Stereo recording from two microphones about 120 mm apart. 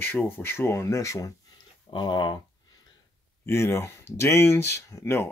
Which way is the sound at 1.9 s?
40° left (ahead or behind).